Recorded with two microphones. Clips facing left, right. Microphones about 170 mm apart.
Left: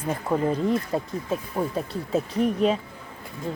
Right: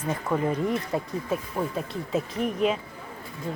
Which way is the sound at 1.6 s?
10° left (ahead or behind).